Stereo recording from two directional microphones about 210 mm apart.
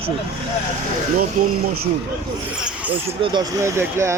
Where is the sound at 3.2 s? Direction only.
20° right (ahead or behind).